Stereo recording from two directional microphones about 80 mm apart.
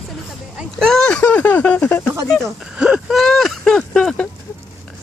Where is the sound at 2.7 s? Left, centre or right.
Centre.